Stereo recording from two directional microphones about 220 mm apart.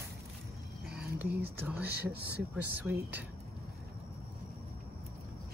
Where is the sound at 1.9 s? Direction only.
45° right (ahead or behind).